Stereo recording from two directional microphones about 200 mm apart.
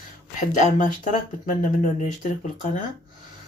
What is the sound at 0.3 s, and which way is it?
Speech, 40° left (ahead or behind).